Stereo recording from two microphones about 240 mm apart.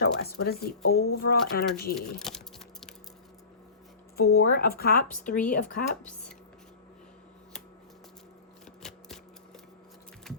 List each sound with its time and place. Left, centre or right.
0.0 s speech: left
2.0 s speech: centre
4.4 s speech: left
8.8 s a sound: centre